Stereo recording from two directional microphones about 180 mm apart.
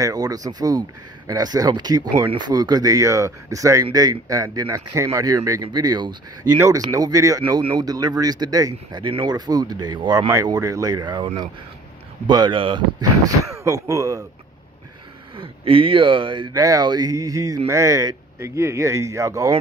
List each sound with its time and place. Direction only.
0.0 s speech: 20° right (ahead or behind)
15.3 s speech: 30° right (ahead or behind)